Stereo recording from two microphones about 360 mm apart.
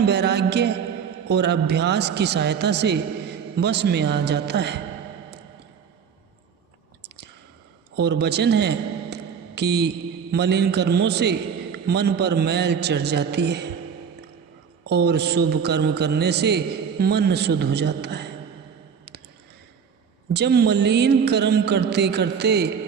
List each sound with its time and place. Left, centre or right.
0.0 s a man's voice: right
7.9 s a man's voice: right
14.8 s a man's voice: right
20.3 s a man's voice: right